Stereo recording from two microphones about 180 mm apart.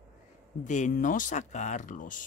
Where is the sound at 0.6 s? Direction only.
40° left (ahead or behind).